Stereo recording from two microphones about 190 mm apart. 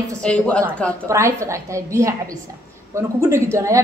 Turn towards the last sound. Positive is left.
turn(degrees=-15)  # may be behind; listen again after turning